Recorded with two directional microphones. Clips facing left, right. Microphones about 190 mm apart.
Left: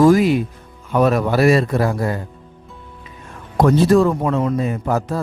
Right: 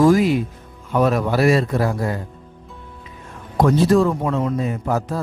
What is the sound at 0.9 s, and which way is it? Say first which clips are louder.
Speech: left 2 dB; 60° left (ahead or behind).